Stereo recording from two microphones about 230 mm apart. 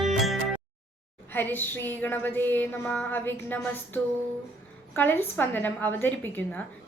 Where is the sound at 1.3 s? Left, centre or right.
Centre.